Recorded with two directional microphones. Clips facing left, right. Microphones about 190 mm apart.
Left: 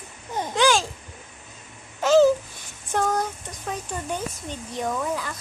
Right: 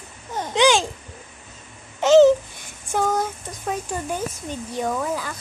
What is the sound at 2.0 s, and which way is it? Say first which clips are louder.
Babbling: right 4 dB; 25° right (ahead or behind).